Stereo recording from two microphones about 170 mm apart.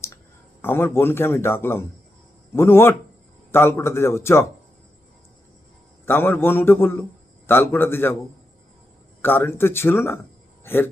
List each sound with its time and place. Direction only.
0.6 s speech: 15° left (ahead or behind)
6.1 s speech: 15° left (ahead or behind)
9.2 s speech: 10° left (ahead or behind)
10.6 s a sound: 10° left (ahead or behind)